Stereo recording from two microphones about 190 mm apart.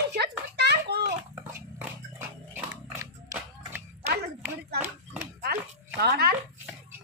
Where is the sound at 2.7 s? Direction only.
15° right (ahead or behind).